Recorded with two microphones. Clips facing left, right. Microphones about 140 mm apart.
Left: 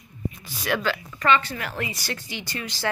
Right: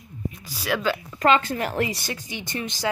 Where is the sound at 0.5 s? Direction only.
5° right (ahead or behind).